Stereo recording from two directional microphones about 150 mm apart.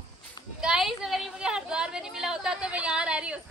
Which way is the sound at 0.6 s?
5° right (ahead or behind).